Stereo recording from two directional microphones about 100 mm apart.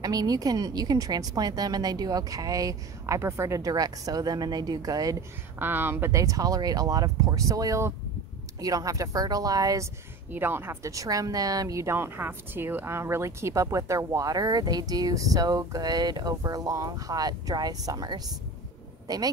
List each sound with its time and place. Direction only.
0.0 s speech: 40° right (ahead or behind)
5.6 s speech: 20° right (ahead or behind); by 9.8 s 35° right (ahead or behind)
10.3 s speech: 20° right (ahead or behind); by 19.3 s 40° right (ahead or behind)